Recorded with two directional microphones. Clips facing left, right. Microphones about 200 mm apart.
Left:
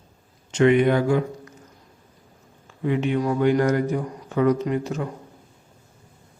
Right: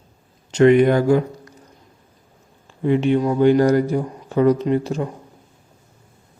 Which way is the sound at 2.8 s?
30° right (ahead or behind).